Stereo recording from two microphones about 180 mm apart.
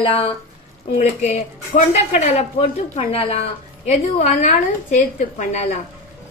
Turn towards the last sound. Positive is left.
turn(degrees=40)  # may be behind; listen again after turning